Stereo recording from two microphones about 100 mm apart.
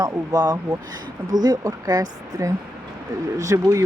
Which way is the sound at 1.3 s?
45° right (ahead or behind).